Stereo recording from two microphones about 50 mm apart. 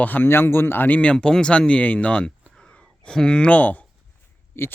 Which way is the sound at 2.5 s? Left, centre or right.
Centre.